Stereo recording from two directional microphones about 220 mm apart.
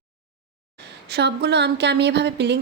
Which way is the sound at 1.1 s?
50° right (ahead or behind).